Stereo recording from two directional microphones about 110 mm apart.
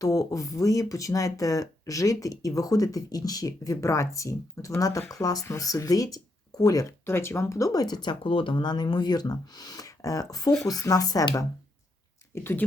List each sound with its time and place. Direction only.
0.0 s speech: 30° left (ahead or behind)
7.0 s speech: 20° left (ahead or behind); by 8.1 s 40° left (ahead or behind)
8.2 s speech: 55° left (ahead or behind); by 11.4 s 35° left (ahead or behind)
12.3 s speech: 20° left (ahead or behind)